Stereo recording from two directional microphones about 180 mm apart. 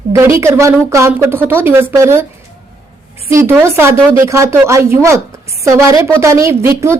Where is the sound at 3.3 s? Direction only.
15° right (ahead or behind).